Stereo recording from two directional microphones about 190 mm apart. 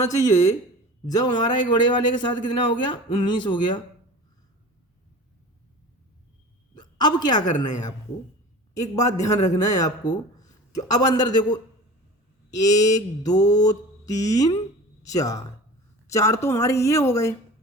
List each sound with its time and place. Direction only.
0.1 s a man's voice: 15° left (ahead or behind)
6.7 s a sound: 20° left (ahead or behind)
9.3 s speech: 40° left (ahead or behind)
9.6 s a man's voice: 20° left (ahead or behind)